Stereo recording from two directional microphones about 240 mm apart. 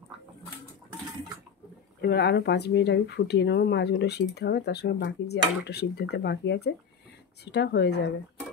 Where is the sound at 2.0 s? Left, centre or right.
Left.